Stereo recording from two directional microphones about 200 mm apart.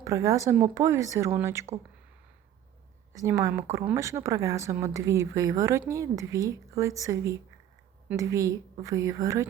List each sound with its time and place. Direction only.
0.0 s speech: 15° right (ahead or behind)
3.1 s speech: 15° right (ahead or behind)